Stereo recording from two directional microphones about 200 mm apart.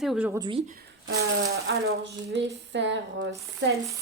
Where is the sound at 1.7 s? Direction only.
65° right (ahead or behind).